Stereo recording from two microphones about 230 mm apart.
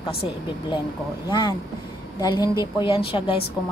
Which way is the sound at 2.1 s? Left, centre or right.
Centre.